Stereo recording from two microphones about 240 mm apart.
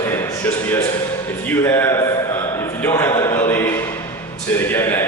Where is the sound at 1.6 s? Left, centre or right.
Centre.